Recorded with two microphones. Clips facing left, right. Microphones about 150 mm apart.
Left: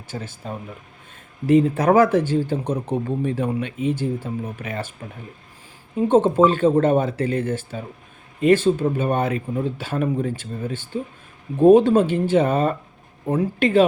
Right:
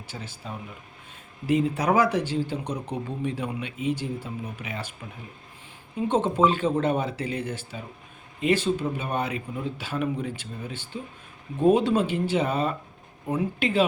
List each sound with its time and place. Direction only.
0.1 s speech: 50° left (ahead or behind)
6.1 s speech: 50° left (ahead or behind)